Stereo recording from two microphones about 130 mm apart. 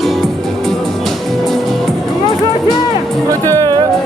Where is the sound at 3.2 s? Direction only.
25° right (ahead or behind).